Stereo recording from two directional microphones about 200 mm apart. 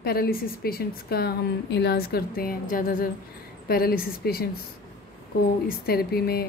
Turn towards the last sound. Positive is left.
turn(degrees=50)  # may be behind; listen again after turning